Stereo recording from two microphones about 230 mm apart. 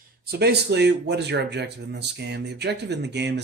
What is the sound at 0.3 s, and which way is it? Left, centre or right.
Speech, right.